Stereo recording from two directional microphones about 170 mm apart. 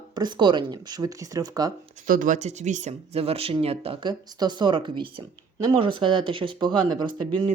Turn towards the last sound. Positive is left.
turn(degrees=-30)  # may be behind; listen again after turning